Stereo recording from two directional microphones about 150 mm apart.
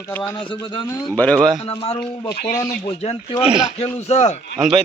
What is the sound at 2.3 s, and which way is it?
Speech, 90° left.